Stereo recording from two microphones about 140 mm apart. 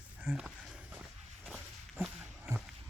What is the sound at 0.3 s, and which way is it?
Speech, 10° right (ahead or behind).